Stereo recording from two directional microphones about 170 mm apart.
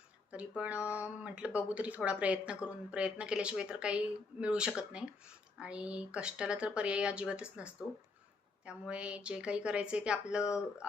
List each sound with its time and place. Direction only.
0.3 s speech: 5° right (ahead or behind)
10.4 s speech: 15° left (ahead or behind)